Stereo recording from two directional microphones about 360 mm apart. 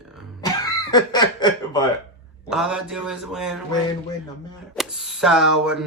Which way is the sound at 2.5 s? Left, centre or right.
Centre.